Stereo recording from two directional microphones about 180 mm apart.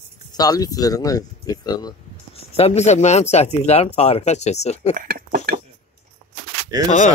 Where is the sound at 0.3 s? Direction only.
20° left (ahead or behind).